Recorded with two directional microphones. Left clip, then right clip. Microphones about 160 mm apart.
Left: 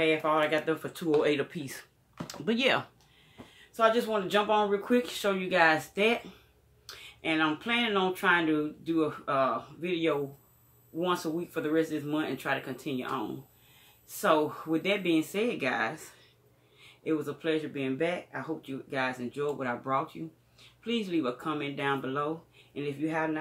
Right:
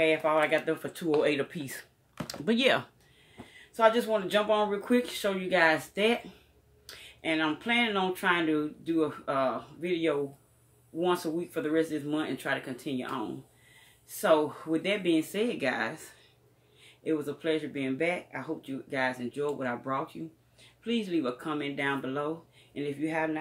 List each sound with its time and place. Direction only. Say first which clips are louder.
0.0 s speech: right 1 dB; 5° left (ahead or behind)
3.7 s speech: right 1 dB; 5° left (ahead or behind)